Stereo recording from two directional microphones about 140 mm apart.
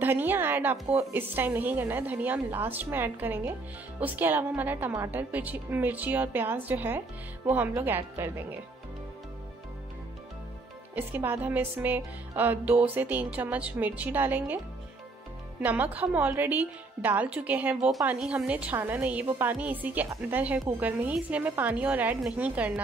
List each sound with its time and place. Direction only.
0.0 s a sound: 15° right (ahead or behind)
0.9 s a woman's voice: 15° right (ahead or behind)
11.0 s a woman's voice: 15° right (ahead or behind)
15.6 s a woman's voice: 10° right (ahead or behind)